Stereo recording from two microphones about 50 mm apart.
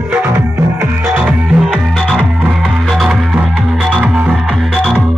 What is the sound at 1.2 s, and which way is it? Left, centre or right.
Music, centre.